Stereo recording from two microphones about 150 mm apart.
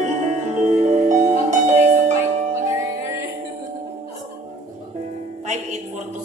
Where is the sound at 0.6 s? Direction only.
55° right (ahead or behind).